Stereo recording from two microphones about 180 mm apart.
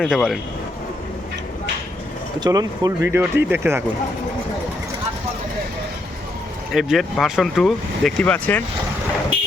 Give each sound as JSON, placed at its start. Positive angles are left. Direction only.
{"t": 0.0, "sound": "speech", "side_deg": 0}
{"t": 2.4, "sound": "speech", "side_deg": -20}
{"t": 6.7, "sound": "speech", "side_deg": 0}